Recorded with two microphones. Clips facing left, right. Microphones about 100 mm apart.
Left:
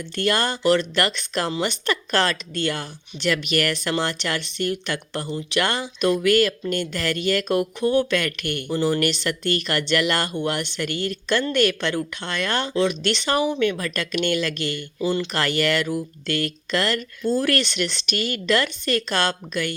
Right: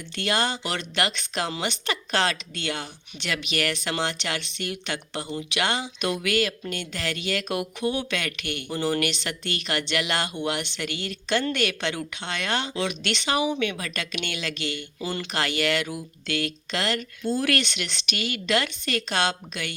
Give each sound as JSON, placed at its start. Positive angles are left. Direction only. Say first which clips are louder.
{"t": 0.2, "sound": "speech", "louder": "left 4 dB", "side_deg": 45}
{"t": 17.2, "sound": "speech", "louder": "left 3 dB", "side_deg": 35}